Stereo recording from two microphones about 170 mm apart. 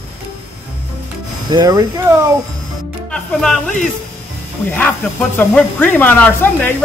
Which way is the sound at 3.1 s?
5° left (ahead or behind).